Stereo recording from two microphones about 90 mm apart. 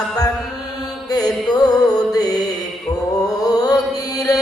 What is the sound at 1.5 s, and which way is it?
Music, 45° left (ahead or behind).